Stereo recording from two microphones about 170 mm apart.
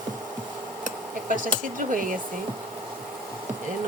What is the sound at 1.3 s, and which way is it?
Speech, 55° right (ahead or behind).